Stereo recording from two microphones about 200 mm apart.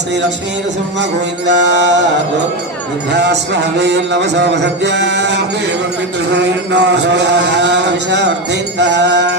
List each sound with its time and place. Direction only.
1.5 s a man's voice: 60° right (ahead or behind)
3.1 s a man's voice: 60° right (ahead or behind)